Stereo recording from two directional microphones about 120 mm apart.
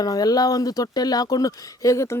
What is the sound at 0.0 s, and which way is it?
Speech, 30° left (ahead or behind).